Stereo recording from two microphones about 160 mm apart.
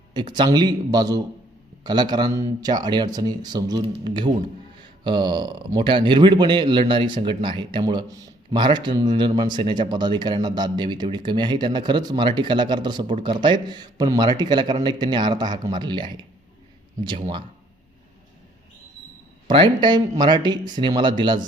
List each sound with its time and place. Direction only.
0.1 s speech: 30° right (ahead or behind)
19.5 s speech: 30° right (ahead or behind)